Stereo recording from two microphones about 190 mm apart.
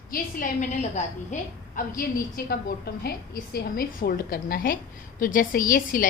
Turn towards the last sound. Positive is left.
turn(degrees=45)  # may be behind; listen again after turning